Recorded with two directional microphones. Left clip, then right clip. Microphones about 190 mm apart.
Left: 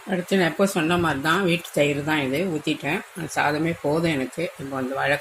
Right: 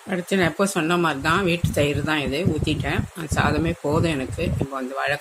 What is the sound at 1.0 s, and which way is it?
Speech, 20° right (ahead or behind).